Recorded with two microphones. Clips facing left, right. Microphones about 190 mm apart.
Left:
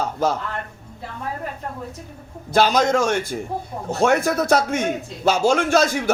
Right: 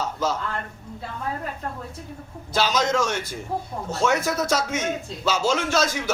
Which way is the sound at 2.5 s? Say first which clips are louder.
Left 5 dB; 55° left (ahead or behind).